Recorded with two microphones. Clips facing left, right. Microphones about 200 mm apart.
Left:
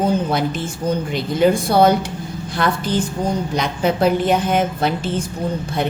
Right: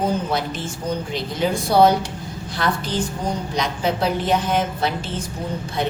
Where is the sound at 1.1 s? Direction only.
55° left (ahead or behind).